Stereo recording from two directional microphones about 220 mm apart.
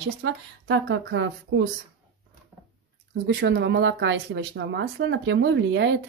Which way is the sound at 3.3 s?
50° right (ahead or behind).